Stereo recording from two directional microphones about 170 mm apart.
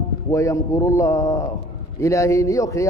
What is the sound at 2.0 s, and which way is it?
Speech, 20° left (ahead or behind).